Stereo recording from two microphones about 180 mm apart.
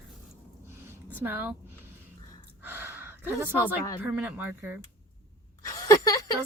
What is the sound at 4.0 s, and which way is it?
Speech, 10° right (ahead or behind).